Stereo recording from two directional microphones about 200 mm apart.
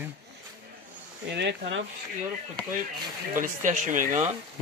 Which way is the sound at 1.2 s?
60° right (ahead or behind).